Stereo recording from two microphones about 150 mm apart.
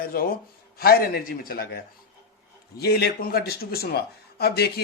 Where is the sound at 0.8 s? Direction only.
90° left.